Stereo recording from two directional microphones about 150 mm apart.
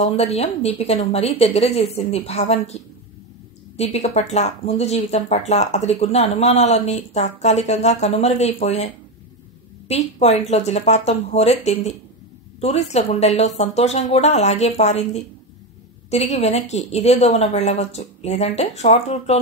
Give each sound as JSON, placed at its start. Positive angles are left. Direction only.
{"t": 0.0, "sound": "speech", "side_deg": 45}
{"t": 3.7, "sound": "speech", "side_deg": 45}